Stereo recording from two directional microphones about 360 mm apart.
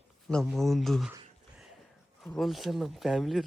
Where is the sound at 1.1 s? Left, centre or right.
Centre.